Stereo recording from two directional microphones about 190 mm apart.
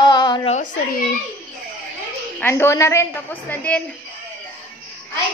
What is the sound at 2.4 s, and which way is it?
A woman's voice, 10° left (ahead or behind).